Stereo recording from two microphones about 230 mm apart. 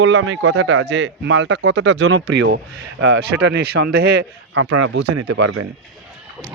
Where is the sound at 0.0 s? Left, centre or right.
Right.